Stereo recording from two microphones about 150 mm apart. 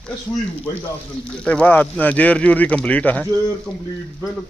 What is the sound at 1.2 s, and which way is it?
A man's voice, 5° left (ahead or behind).